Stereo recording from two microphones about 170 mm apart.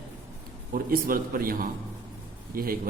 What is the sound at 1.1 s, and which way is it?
A man's voice, 55° right (ahead or behind).